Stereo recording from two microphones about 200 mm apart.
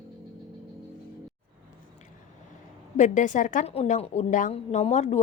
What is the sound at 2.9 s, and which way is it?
A woman's voice, 40° left (ahead or behind).